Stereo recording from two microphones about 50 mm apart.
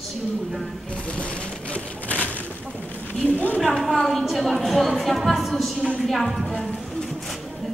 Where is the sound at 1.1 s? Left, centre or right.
Left.